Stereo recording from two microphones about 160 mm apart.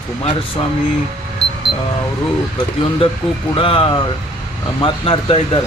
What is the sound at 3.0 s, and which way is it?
Speech, 35° left (ahead or behind).